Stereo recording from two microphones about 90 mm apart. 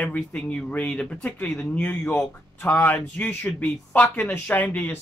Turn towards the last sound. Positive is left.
turn(degrees=20)  # may be behind; listen again after turning